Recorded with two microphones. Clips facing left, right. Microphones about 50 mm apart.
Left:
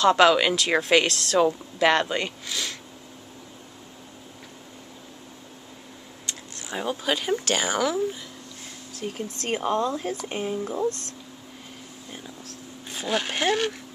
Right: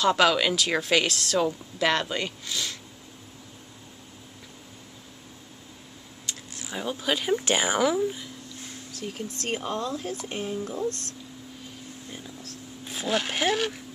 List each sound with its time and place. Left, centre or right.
0.0 s speech: centre
1.1 s speech: centre
1.4 s speech: centre
6.2 s a sound: centre
6.8 s speech: centre
7.4 s speech: centre
9.0 s speech: centre
12.8 s speech: centre